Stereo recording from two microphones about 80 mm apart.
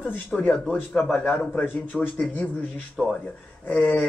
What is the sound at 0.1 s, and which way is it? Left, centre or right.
Speech, left.